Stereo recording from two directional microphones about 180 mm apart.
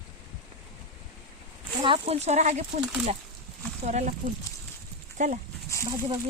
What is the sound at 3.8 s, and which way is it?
Speech, 40° right (ahead or behind).